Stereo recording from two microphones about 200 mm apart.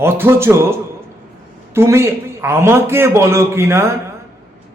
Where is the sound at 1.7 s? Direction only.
15° right (ahead or behind).